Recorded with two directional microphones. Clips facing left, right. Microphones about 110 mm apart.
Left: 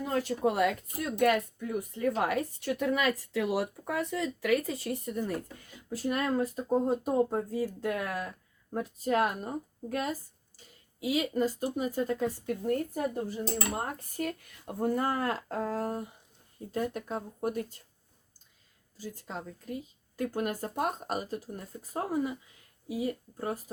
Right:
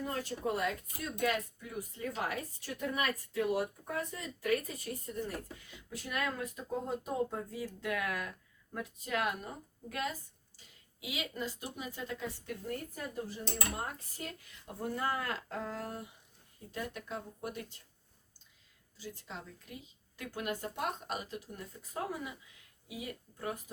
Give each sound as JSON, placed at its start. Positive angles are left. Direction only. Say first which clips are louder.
{"t": 0.0, "sound": "speech", "louder": "left 8 dB", "side_deg": 80}
{"t": 5.5, "sound": "speech", "louder": "left 7 dB", "side_deg": 45}
{"t": 14.2, "sound": "speech", "louder": "left 10 dB", "side_deg": 55}
{"t": 18.9, "sound": "speech", "louder": "left 6 dB", "side_deg": 45}